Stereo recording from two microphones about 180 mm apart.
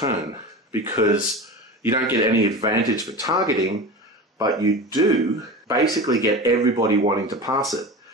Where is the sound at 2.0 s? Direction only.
20° right (ahead or behind).